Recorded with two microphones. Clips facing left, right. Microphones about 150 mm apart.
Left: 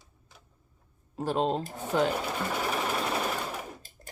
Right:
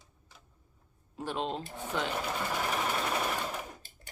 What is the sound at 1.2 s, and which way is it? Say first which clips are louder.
Speech: left 7 dB; 40° left (ahead or behind).